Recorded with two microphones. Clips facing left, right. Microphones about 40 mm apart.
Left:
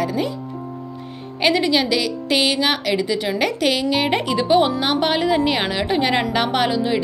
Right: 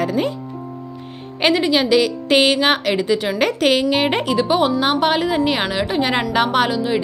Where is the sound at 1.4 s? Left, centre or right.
Centre.